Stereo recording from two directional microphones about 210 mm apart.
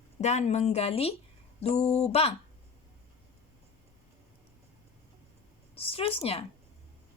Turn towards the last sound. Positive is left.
turn(degrees=30)  # may be behind; listen again after turning